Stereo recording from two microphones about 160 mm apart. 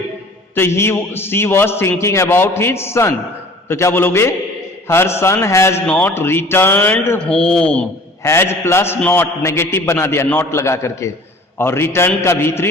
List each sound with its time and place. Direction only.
0.5 s a man's voice: 15° left (ahead or behind)
8.2 s a man's voice: 15° left (ahead or behind)